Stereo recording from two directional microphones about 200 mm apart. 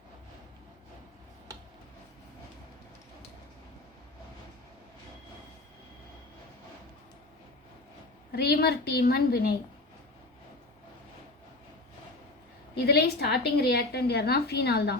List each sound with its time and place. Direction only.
8.3 s a woman's voice: 50° left (ahead or behind)
12.7 s a woman's voice: 55° left (ahead or behind)